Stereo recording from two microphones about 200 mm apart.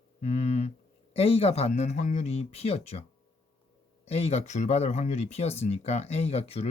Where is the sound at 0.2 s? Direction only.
35° left (ahead or behind).